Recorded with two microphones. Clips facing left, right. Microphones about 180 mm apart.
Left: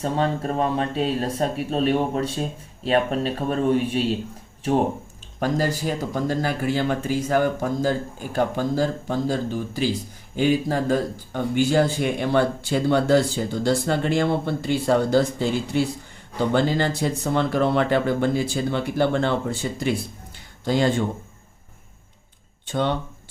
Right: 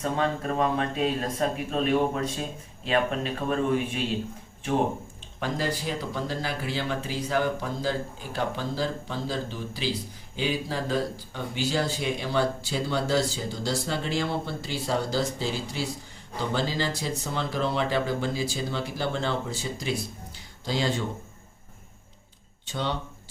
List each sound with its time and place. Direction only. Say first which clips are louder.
0.0 s speech: left 4 dB; 30° left (ahead or behind)
5.4 s speech: left 6 dB; 45° left (ahead or behind)
22.6 s speech: left 7 dB; 55° left (ahead or behind)